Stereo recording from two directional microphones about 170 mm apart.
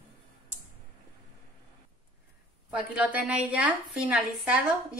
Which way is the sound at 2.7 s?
10° right (ahead or behind).